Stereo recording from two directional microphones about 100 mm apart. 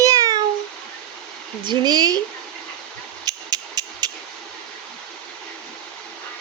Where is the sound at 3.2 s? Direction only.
40° right (ahead or behind).